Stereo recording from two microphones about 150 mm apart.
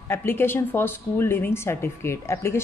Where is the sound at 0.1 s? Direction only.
15° left (ahead or behind).